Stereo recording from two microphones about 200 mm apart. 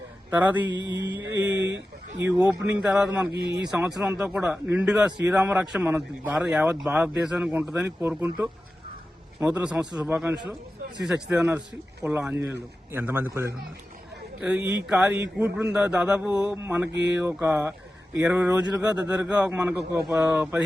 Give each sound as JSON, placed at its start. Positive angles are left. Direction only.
{"t": 0.3, "sound": "speech", "side_deg": -10}
{"t": 0.7, "sound": "mantra", "side_deg": 20}
{"t": 1.6, "sound": "speech", "side_deg": -65}
{"t": 2.2, "sound": "a man's voice", "side_deg": -10}
{"t": 9.4, "sound": "speech", "side_deg": -5}